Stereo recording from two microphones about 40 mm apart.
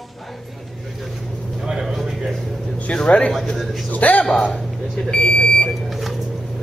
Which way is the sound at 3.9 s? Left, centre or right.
Left.